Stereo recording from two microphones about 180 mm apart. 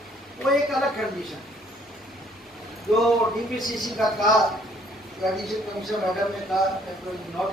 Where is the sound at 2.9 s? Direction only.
Centre (ahead or behind).